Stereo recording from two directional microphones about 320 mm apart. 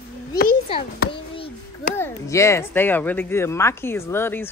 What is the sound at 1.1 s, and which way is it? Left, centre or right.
A child's voice, centre.